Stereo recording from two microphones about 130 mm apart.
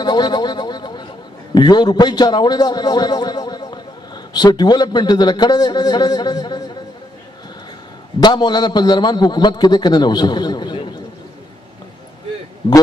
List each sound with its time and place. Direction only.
0.0 s a man's voice: 35° left (ahead or behind)
8.2 s a man's voice: 35° left (ahead or behind)